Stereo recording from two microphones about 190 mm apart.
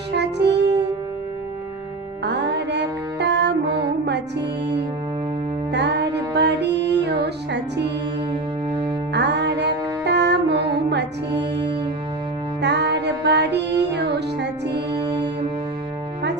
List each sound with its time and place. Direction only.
0.1 s music: 65° right (ahead or behind)
2.2 s music: 65° right (ahead or behind)
9.1 s music: 65° right (ahead or behind)